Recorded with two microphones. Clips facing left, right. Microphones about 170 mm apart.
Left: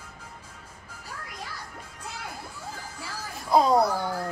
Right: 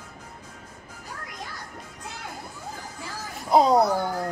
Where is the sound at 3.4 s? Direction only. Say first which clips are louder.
Right 2 dB; 20° right (ahead or behind).